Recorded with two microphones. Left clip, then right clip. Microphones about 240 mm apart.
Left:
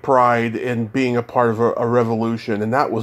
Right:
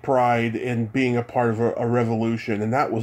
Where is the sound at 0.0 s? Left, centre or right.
Centre.